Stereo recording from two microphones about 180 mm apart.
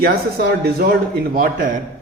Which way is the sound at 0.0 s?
60° right (ahead or behind).